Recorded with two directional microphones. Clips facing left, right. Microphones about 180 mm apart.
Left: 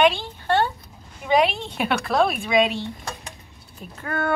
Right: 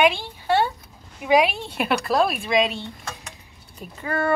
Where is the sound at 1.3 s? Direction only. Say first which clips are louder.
Right 1 dB; 5° right (ahead or behind).